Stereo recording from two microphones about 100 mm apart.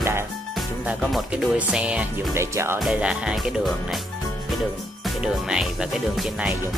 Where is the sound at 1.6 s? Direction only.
10° right (ahead or behind).